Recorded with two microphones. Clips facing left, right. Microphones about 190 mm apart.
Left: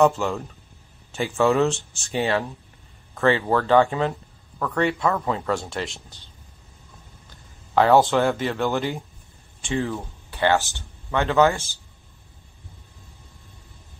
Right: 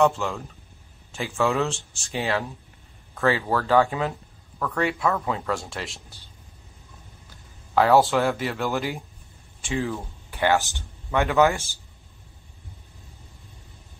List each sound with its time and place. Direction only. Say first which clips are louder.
0.0 s speech: left 2 dB; 5° left (ahead or behind)
7.7 s speech: left 1 dB; centre (ahead or behind)
10.3 s speech: left 1 dB; 15° right (ahead or behind)